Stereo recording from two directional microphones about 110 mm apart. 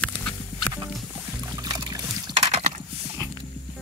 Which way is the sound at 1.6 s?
40° right (ahead or behind).